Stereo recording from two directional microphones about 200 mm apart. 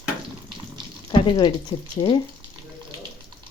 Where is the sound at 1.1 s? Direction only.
20° left (ahead or behind).